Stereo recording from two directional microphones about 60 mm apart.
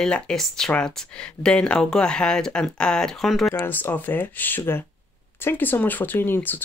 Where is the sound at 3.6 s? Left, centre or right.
Left.